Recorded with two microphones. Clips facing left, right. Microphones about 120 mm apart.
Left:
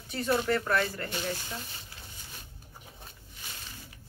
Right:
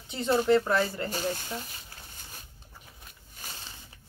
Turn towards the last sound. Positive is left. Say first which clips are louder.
# right 2 dB
turn(degrees=-40)  # may be behind; listen again after turning